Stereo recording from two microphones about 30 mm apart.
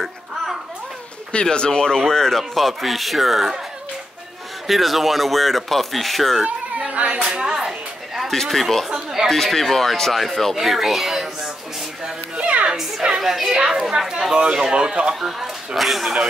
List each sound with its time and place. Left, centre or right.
1.3 s speech: left
2.5 s speech: centre
4.6 s speech: centre
6.4 s a sound: right
7.2 s a sound: right
8.5 s speech: centre
10.5 s speech: centre
12.4 s music: right
13.2 s a child's voice: centre
14.3 s speech: right
15.1 s speech: centre